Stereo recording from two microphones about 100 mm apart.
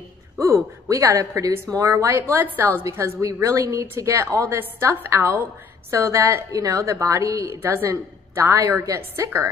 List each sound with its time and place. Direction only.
0.4 s a woman's voice: 30° right (ahead or behind)
5.9 s a woman's voice: 30° right (ahead or behind)